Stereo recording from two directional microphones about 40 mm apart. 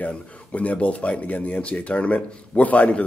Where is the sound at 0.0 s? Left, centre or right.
Left.